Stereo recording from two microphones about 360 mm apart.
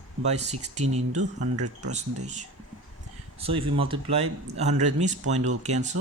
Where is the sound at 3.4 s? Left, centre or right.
Centre.